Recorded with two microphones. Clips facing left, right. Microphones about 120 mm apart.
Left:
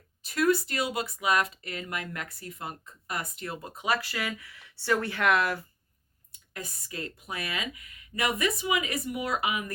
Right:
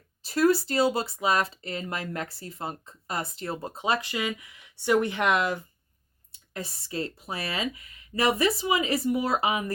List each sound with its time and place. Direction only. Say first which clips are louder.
0.2 s speech: right 3 dB; 30° right (ahead or behind)